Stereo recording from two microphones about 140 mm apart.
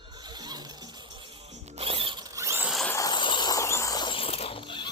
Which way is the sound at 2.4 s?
20° right (ahead or behind).